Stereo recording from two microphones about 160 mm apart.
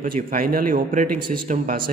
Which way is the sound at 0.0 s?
65° right (ahead or behind).